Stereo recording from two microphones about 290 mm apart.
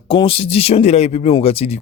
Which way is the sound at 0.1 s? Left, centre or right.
Centre.